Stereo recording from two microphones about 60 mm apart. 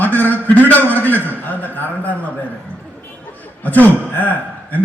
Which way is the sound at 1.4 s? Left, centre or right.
Left.